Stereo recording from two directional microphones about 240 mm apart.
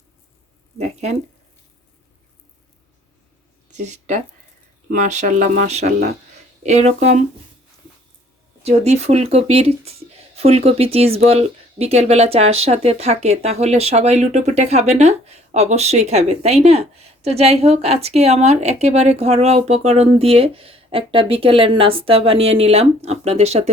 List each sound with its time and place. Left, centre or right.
3.7 s speech: right
8.6 s speech: right